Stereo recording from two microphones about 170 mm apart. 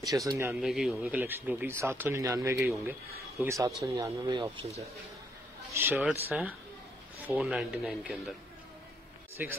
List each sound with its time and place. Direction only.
0.0 s speech: 20° right (ahead or behind)
0.6 s speech: centre (ahead or behind); by 4.8 s 35° right (ahead or behind)
5.7 s speech: 10° right (ahead or behind)